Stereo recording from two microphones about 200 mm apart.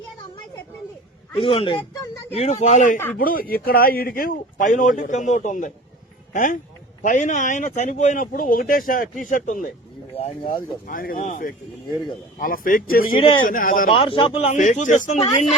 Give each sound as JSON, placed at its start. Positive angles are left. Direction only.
{"t": 1.4, "sound": "speech", "side_deg": 25}
{"t": 10.2, "sound": "speech", "side_deg": 30}
{"t": 10.8, "sound": "speech", "side_deg": 45}
{"t": 13.9, "sound": "speech", "side_deg": 25}